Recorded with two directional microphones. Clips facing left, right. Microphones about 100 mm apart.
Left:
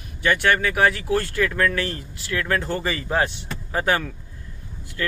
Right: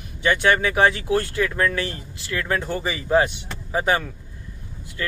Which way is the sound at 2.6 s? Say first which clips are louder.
Left 1 dB; 10° right (ahead or behind).